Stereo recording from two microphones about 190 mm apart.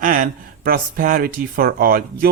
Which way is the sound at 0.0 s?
45° right (ahead or behind).